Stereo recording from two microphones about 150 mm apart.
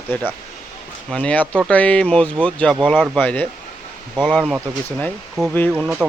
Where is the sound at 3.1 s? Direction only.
10° left (ahead or behind).